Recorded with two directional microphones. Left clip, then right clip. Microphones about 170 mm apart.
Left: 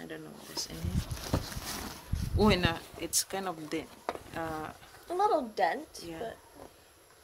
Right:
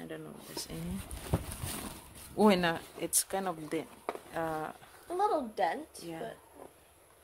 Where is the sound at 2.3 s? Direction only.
45° right (ahead or behind).